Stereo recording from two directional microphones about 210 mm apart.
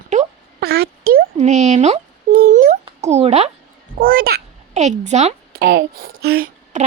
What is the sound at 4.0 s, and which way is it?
Speech, 45° right (ahead or behind).